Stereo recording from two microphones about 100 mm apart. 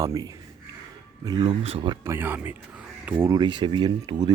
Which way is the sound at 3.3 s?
50° right (ahead or behind).